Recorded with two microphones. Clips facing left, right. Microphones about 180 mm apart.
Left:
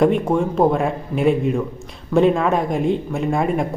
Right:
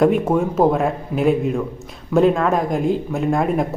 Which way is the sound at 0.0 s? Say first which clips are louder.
Right 1 dB; 5° right (ahead or behind).